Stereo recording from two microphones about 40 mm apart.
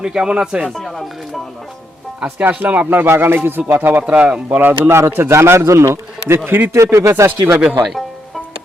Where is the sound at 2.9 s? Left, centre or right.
Right.